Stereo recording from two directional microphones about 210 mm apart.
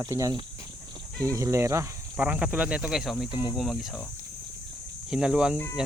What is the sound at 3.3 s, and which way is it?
Speech, 20° left (ahead or behind).